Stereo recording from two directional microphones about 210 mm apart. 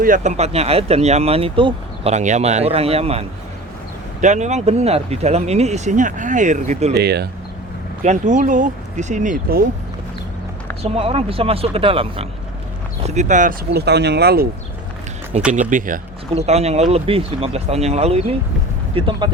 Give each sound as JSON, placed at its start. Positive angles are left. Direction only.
{"t": 0.0, "sound": "speech", "side_deg": -35}
{"t": 6.9, "sound": "speech", "side_deg": -50}
{"t": 8.0, "sound": "speech", "side_deg": -35}
{"t": 10.9, "sound": "speech", "side_deg": -25}
{"t": 15.3, "sound": "speech", "side_deg": -30}